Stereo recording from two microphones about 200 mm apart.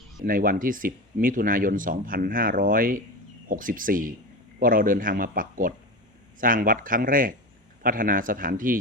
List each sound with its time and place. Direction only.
0.2 s speech: 45° right (ahead or behind)